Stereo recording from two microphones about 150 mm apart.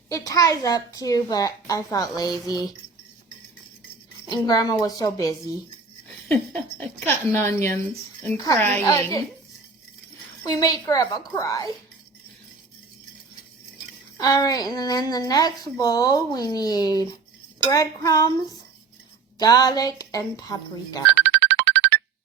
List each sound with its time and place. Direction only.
0.1 s a woman's voice: 20° left (ahead or behind)
4.3 s a woman's voice: 25° left (ahead or behind)
6.2 s a woman's voice: 10° left (ahead or behind)
10.4 s a woman's voice: 25° left (ahead or behind)
14.2 s a woman's voice: 25° left (ahead or behind)
19.4 s a woman's voice: 25° left (ahead or behind)
21.5 s music: 90° right